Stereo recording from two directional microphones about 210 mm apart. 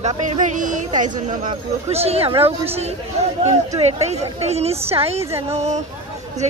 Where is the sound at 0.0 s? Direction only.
35° right (ahead or behind).